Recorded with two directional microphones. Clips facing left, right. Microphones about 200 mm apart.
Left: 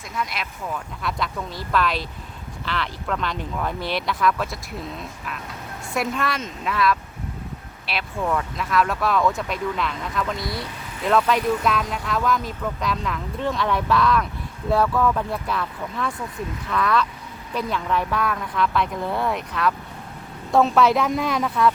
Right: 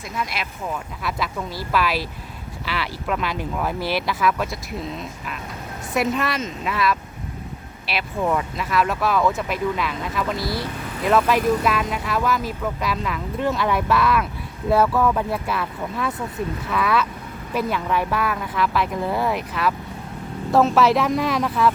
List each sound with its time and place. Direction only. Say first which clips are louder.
0.2 s speech: even; 5° right (ahead or behind)
8.2 s speech: right 2 dB; 15° right (ahead or behind)
8.5 s speech: even; 5° right (ahead or behind)